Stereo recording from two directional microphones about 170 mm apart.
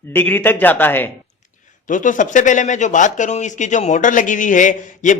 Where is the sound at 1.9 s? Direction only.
50° left (ahead or behind).